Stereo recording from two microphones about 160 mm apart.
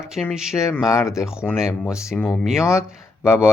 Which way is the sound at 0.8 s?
20° left (ahead or behind).